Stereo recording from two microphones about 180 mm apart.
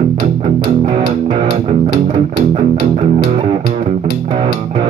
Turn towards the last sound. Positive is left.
turn(degrees=-30)  # may be behind; listen again after turning